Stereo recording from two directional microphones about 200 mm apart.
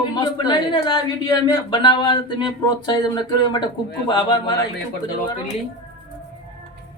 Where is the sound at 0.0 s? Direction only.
20° left (ahead or behind).